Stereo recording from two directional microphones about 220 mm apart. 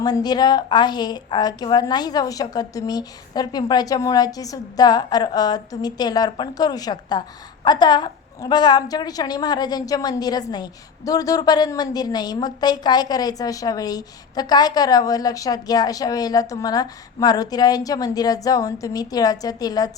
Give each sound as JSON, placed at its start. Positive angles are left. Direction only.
{"t": 0.0, "sound": "a woman's voice", "side_deg": 20}